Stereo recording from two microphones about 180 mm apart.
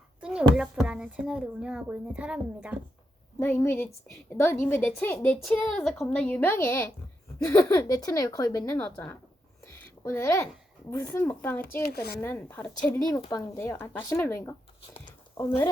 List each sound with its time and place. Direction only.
0.2 s speech: 5° right (ahead or behind)
3.3 s a woman's voice: 10° left (ahead or behind)
11.9 s speech: 60° left (ahead or behind)
12.2 s a woman's voice: 10° left (ahead or behind)